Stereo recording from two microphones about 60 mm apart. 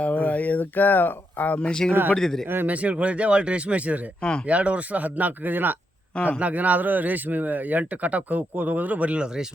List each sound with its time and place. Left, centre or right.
0.0 s speech: left
1.9 s a man's voice: right
2.1 s a man's voice: centre
2.6 s speech: right
4.2 s a man's voice: centre
4.4 s speech: right